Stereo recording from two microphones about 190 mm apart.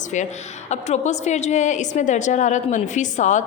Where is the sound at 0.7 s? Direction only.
35° left (ahead or behind).